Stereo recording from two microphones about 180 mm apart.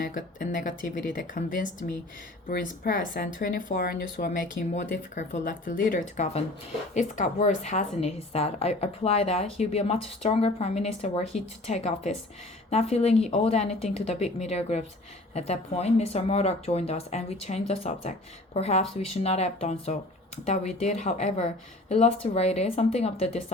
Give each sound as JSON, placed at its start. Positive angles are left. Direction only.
{"t": 0.0, "sound": "speech", "side_deg": 50}
{"t": 4.7, "sound": "a woman's voice", "side_deg": 45}